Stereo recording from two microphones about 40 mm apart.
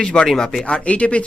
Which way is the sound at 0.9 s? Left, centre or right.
Left.